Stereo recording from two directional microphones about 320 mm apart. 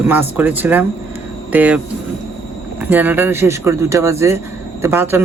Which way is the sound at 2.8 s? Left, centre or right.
Centre.